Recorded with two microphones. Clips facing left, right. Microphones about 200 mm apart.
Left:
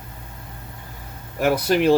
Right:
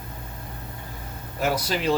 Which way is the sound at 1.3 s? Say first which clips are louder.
Left 6 dB; 60° left (ahead or behind).